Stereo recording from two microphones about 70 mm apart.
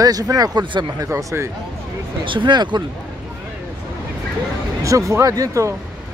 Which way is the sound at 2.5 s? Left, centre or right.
Right.